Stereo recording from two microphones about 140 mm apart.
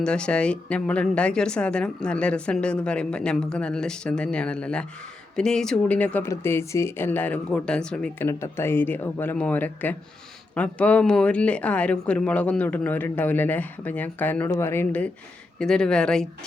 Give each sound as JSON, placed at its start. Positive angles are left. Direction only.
{"t": 0.0, "sound": "speech", "side_deg": 5}
{"t": 8.2, "sound": "speech", "side_deg": 15}